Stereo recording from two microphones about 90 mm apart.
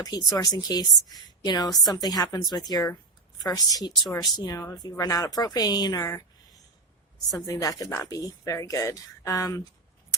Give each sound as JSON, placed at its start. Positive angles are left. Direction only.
{"t": 0.0, "sound": "a woman's voice", "side_deg": 45}
{"t": 7.3, "sound": "speech", "side_deg": 40}